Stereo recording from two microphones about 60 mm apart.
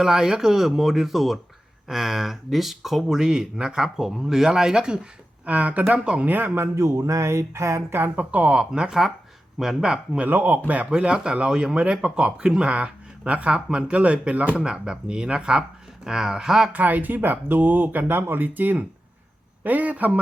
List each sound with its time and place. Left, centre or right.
0.0 s speech: centre
5.5 s speech: right
6.3 s a man's voice: right
6.6 s a sound: right
7.8 s speech: right; by 10.2 s centre
10.2 s speech: right; by 16.7 s centre
16.7 s speech: right